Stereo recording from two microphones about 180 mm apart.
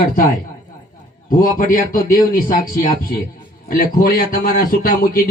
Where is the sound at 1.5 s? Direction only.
50° left (ahead or behind).